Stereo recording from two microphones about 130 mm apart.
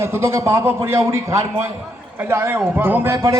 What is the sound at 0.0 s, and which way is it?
A man's voice, 20° right (ahead or behind).